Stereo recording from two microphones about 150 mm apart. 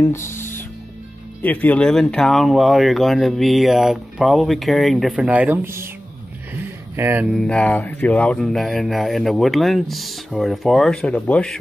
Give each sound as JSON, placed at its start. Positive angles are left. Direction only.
{"t": 0.3, "sound": "music", "side_deg": 15}
{"t": 1.4, "sound": "speech", "side_deg": 10}
{"t": 7.0, "sound": "speech", "side_deg": -15}
{"t": 7.2, "sound": "speech", "side_deg": 5}